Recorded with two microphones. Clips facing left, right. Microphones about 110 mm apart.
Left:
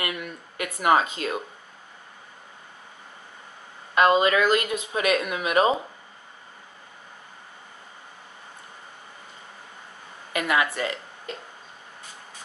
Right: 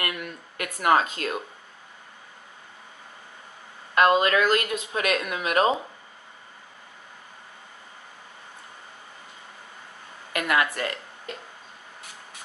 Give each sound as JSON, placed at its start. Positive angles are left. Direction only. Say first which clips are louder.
{"t": 0.0, "sound": "speech", "louder": "left 1 dB", "side_deg": 5}
{"t": 3.9, "sound": "speech", "louder": "left 1 dB", "side_deg": 0}
{"t": 10.3, "sound": "speech", "louder": "even", "side_deg": 5}